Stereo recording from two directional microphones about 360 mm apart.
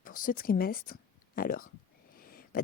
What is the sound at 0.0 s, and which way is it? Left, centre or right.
Speech, left.